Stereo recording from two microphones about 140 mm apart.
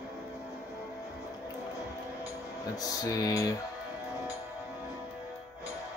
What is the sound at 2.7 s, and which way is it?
Music, 25° left (ahead or behind).